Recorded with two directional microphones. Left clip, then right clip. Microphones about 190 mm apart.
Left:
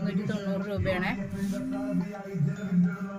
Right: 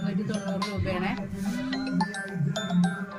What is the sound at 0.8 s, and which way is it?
Speech, 25° left (ahead or behind).